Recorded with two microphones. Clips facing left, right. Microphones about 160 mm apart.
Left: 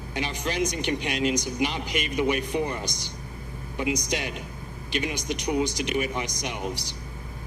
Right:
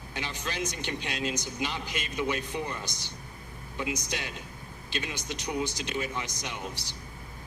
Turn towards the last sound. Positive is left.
turn(degrees=15)  # may be behind; listen again after turning